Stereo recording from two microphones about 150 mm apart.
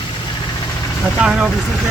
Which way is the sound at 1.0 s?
5° right (ahead or behind).